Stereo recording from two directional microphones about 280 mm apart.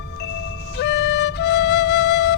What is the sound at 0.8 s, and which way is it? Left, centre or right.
Flute, left.